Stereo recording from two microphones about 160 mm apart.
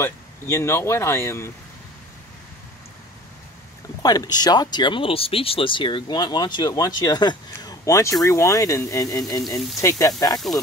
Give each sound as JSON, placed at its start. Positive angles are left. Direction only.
{"t": 0.0, "sound": "speech", "side_deg": 15}
{"t": 4.0, "sound": "speech", "side_deg": 25}